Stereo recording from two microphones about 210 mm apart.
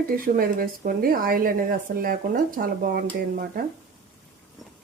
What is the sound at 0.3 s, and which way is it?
Speech, 45° right (ahead or behind).